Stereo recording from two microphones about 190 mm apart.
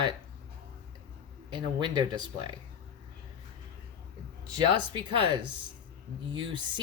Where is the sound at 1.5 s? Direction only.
25° right (ahead or behind).